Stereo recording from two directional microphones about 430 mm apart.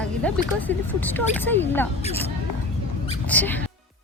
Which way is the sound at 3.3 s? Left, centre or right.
Centre.